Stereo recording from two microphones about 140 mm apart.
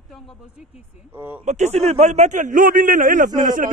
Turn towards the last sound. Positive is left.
turn(degrees=-70)  # may be behind; listen again after turning